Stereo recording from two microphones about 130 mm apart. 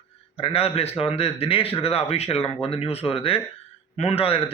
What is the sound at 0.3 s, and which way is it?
A man's voice, 50° left (ahead or behind).